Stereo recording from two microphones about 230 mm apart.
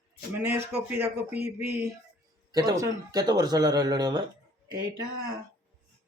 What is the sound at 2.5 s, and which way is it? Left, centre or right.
Speech, centre.